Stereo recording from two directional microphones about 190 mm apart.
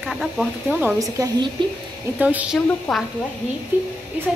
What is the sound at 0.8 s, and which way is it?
A woman's voice, 15° right (ahead or behind).